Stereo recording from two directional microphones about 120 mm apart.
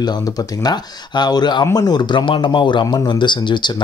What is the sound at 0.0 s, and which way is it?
Speech, 35° left (ahead or behind).